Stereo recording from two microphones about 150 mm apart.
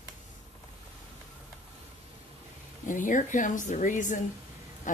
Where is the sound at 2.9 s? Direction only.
60° left (ahead or behind).